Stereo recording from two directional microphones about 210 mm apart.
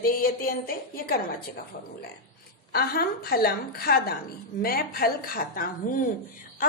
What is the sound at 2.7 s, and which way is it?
A woman's voice, 50° left (ahead or behind).